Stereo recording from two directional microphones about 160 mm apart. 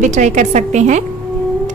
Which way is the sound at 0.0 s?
50° right (ahead or behind).